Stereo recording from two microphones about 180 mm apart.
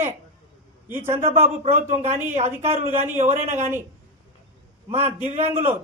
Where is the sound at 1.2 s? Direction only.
35° right (ahead or behind).